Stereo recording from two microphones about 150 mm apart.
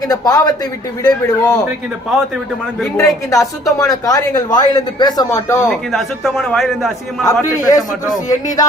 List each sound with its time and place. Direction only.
0.1 s speech: 25° left (ahead or behind)
3.0 s speech: 20° left (ahead or behind)
5.6 s a man's voice: centre (ahead or behind)
7.6 s speech: 25° left (ahead or behind)